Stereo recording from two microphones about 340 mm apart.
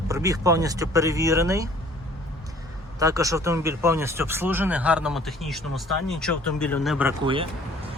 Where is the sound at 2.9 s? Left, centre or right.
Centre.